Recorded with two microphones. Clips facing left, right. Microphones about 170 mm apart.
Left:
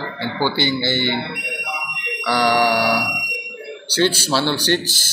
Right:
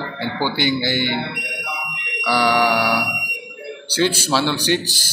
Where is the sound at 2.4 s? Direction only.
40° left (ahead or behind).